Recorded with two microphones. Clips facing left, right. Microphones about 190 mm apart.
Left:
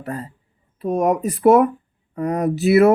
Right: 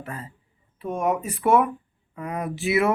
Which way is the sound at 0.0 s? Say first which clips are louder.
Left 7 dB; 40° left (ahead or behind).